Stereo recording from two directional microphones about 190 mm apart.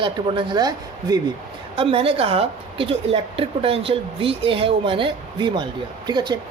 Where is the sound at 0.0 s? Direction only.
25° right (ahead or behind).